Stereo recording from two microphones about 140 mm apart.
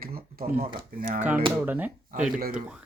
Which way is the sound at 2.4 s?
90° right.